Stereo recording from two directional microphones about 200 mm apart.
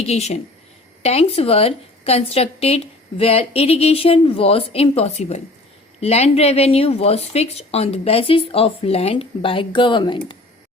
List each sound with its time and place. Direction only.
0.0 s speech: 30° left (ahead or behind)